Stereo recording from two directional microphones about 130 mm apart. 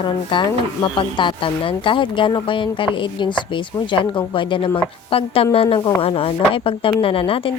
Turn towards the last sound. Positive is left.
turn(degrees=45)  # may be behind; listen again after turning